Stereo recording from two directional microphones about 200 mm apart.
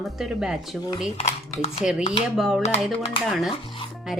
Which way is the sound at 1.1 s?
30° left (ahead or behind).